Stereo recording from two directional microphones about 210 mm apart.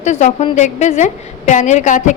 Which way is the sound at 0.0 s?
35° left (ahead or behind).